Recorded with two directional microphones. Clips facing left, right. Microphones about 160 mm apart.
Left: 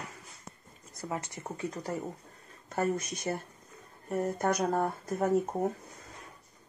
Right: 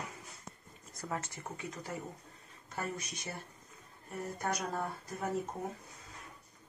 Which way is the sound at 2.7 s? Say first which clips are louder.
Left 10 dB; 50° left (ahead or behind).